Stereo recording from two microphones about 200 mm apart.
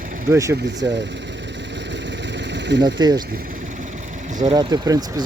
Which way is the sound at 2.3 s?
60° right (ahead or behind).